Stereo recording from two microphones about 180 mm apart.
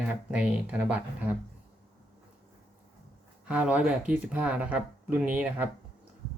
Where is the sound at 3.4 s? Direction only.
5° right (ahead or behind).